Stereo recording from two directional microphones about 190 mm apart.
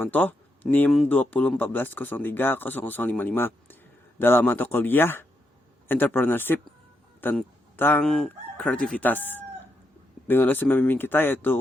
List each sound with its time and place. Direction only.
0.0 s speech: 10° left (ahead or behind)